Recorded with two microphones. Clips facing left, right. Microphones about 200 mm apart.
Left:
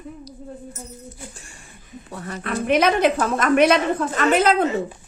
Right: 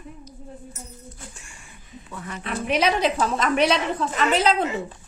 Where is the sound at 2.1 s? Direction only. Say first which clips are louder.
Left 3 dB; 40° left (ahead or behind).